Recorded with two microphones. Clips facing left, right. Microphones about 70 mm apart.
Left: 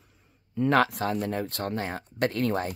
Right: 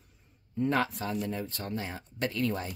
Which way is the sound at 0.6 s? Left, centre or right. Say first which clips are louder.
Left 6 dB; left.